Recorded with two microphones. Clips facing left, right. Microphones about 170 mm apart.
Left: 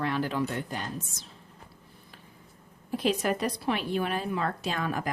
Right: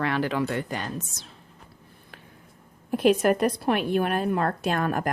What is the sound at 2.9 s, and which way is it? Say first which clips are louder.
A woman's voice: right 7 dB; 55° right (ahead or behind).